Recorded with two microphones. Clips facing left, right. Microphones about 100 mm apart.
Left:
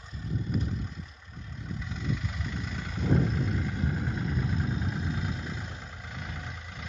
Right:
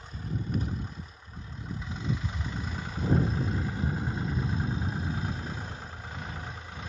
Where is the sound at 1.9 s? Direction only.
30° right (ahead or behind).